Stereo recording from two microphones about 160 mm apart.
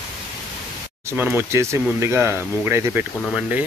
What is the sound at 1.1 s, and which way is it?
Speech, 15° right (ahead or behind).